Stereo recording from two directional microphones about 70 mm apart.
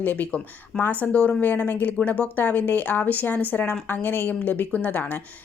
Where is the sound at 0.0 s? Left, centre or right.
Left.